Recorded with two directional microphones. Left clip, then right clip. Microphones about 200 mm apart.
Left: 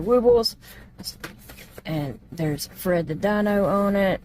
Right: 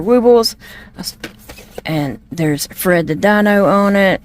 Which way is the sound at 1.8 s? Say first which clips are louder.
Right 10 dB; 40° right (ahead or behind).